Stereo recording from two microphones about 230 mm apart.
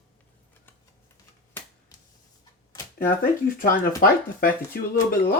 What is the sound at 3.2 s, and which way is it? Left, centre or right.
Speech, left.